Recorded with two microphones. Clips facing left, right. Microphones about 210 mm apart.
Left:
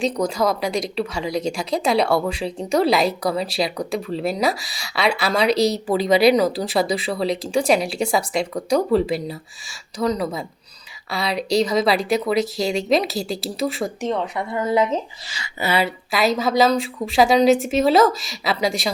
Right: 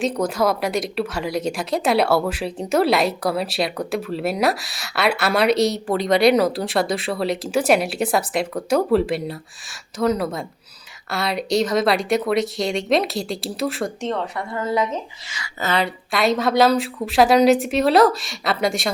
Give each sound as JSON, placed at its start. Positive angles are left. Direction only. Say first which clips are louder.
{"t": 0.0, "sound": "speech", "louder": "even", "side_deg": -5}
{"t": 14.1, "sound": "a woman's voice", "louder": "left 2 dB", "side_deg": 15}
{"t": 15.6, "sound": "speech", "louder": "left 1 dB", "side_deg": 5}